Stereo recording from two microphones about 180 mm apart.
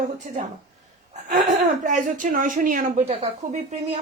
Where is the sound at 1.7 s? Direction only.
45° right (ahead or behind).